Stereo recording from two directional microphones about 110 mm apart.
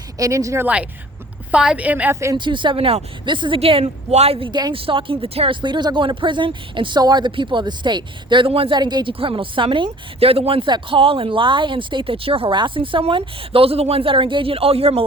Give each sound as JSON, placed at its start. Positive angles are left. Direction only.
{"t": 0.2, "sound": "speech", "side_deg": -30}
{"t": 1.5, "sound": "a woman's voice", "side_deg": -10}
{"t": 2.3, "sound": "speech", "side_deg": -45}
{"t": 3.6, "sound": "speech", "side_deg": -60}
{"t": 5.6, "sound": "speech", "side_deg": -45}
{"t": 8.8, "sound": "speech", "side_deg": -40}
{"t": 9.1, "sound": "speech", "side_deg": -55}